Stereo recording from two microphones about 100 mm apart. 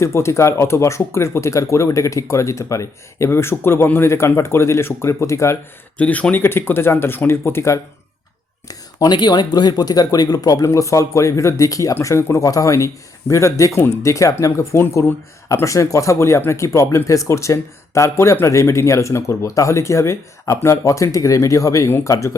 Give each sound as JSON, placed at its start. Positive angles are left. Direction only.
{"t": 0.0, "sound": "speech", "side_deg": 30}
{"t": 6.0, "sound": "speech", "side_deg": 15}
{"t": 8.6, "sound": "speech", "side_deg": 40}